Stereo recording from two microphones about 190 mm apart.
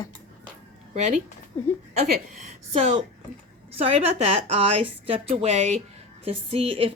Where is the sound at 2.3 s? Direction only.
35° right (ahead or behind).